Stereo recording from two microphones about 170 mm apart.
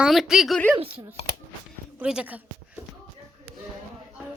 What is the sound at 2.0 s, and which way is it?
Speech, 5° right (ahead or behind).